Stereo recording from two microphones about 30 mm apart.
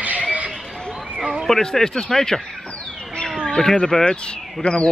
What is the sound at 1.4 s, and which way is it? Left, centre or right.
Speech, centre.